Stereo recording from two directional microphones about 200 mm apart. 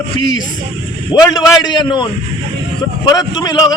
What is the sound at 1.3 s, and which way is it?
A man's voice, 20° left (ahead or behind).